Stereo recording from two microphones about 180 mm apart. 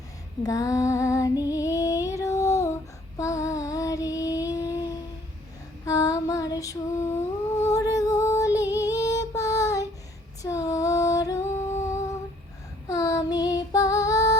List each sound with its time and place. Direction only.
0.4 s music: 20° left (ahead or behind)
3.2 s female singing: 15° left (ahead or behind)
10.4 s music: 20° left (ahead or behind)
12.9 s child singing: 15° left (ahead or behind)